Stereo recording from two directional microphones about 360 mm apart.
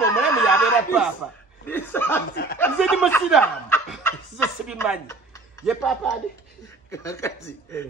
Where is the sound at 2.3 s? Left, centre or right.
Left.